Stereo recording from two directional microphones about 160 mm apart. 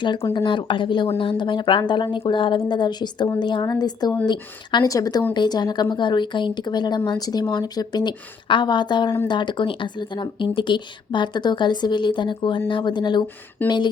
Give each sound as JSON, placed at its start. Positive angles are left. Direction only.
{"t": 0.0, "sound": "speech", "side_deg": 30}